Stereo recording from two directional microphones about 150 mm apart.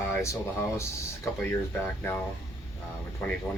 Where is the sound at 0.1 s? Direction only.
20° left (ahead or behind).